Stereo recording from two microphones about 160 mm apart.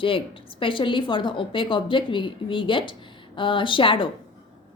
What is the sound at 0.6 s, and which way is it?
A woman's voice, 30° left (ahead or behind).